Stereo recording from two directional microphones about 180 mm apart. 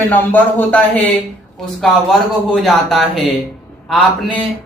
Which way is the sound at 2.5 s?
Centre (ahead or behind).